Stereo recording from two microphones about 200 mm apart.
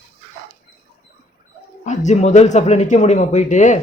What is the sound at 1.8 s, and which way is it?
Speech, 35° left (ahead or behind).